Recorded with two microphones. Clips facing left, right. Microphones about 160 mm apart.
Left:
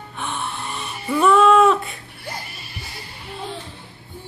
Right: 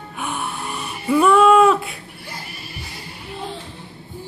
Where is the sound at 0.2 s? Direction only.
5° right (ahead or behind).